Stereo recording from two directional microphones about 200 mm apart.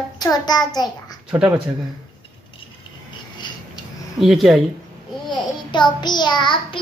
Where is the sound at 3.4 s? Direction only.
20° left (ahead or behind).